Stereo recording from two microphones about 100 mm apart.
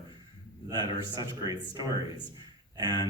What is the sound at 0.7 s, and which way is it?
Speech, 40° right (ahead or behind).